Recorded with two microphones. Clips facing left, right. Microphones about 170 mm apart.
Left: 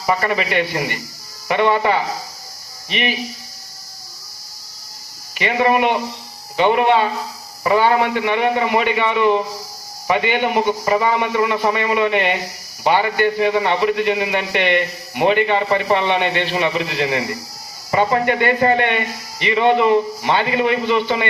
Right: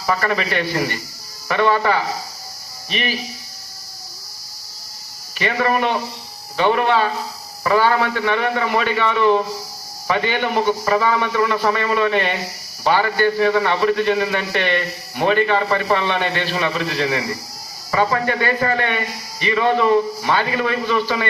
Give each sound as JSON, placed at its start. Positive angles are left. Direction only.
{"t": 0.0, "sound": "a man's voice", "side_deg": 15}
{"t": 5.4, "sound": "a man's voice", "side_deg": 20}